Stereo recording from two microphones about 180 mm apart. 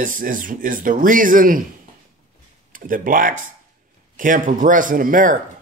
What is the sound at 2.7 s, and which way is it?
A man's voice, 50° right (ahead or behind).